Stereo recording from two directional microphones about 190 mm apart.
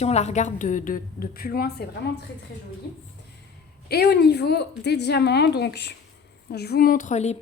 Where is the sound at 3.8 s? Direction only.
55° left (ahead or behind); by 7.3 s 35° left (ahead or behind).